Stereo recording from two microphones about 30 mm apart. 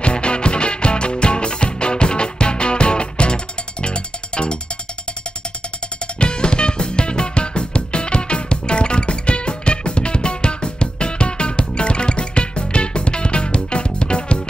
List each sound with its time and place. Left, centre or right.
0.0 s music: left
6.1 s music: left